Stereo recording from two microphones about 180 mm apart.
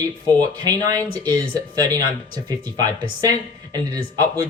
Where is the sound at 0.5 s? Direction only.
20° right (ahead or behind).